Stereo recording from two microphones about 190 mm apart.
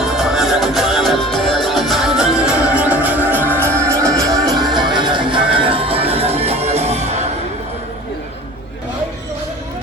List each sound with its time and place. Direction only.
0.0 s music: centre (ahead or behind); by 7.3 s 35° right (ahead or behind)